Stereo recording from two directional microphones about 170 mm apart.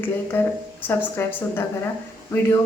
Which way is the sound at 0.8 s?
10° left (ahead or behind).